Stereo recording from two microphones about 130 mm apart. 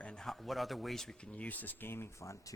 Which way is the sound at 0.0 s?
5° left (ahead or behind).